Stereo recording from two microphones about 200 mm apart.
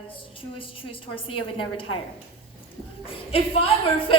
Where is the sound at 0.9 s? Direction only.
25° left (ahead or behind).